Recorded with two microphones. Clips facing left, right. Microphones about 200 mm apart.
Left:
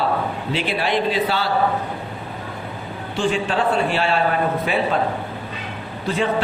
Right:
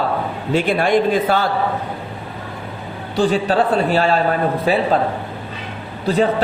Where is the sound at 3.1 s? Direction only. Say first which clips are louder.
Right 5 dB; 35° right (ahead or behind).